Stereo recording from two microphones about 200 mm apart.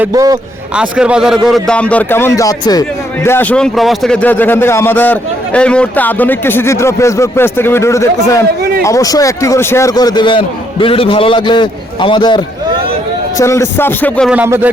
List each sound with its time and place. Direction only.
0.1 s a man's voice: 20° right (ahead or behind)
0.8 s a man's voice: 5° right (ahead or behind)
14.3 s speech: 10° right (ahead or behind)